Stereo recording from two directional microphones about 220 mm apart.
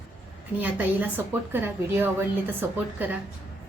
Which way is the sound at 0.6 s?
10° right (ahead or behind).